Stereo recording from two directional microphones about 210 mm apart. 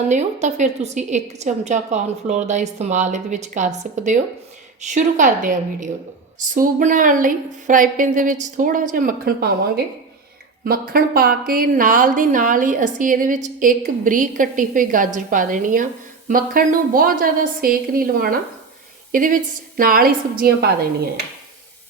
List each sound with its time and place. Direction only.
0.1 s a woman's voice: 35° right (ahead or behind)